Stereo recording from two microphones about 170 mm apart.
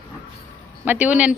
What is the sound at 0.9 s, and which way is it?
Speech, 10° right (ahead or behind).